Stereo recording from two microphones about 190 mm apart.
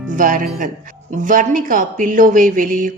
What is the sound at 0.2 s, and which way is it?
Speech, 45° right (ahead or behind).